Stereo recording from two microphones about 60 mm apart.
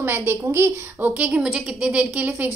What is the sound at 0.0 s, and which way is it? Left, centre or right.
A woman's voice, right.